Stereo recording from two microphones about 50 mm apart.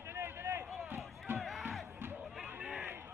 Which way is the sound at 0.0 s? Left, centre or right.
Right.